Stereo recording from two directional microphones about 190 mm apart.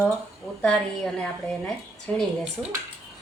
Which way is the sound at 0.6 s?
5° left (ahead or behind).